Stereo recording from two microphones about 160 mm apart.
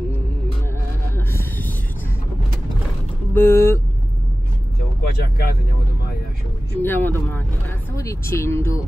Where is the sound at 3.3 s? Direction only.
15° left (ahead or behind).